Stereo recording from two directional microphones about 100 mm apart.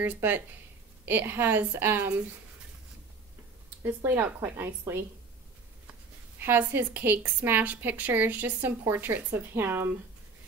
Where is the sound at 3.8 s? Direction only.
20° right (ahead or behind).